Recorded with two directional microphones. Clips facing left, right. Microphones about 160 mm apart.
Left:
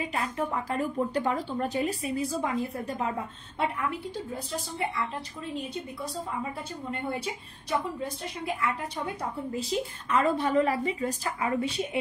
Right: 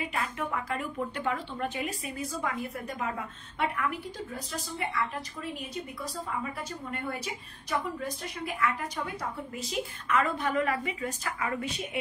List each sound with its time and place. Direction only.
0.0 s a woman's voice: 30° left (ahead or behind)
8.0 s a woman's voice: 25° left (ahead or behind)